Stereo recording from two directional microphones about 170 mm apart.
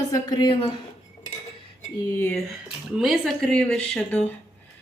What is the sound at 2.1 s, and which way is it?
Speech, 15° left (ahead or behind).